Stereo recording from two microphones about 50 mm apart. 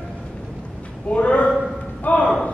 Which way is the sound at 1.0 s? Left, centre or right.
Left.